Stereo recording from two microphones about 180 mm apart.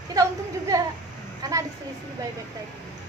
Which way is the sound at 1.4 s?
20° right (ahead or behind).